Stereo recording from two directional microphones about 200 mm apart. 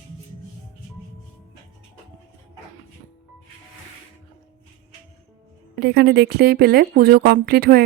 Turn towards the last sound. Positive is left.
turn(degrees=-50)  # may be behind; listen again after turning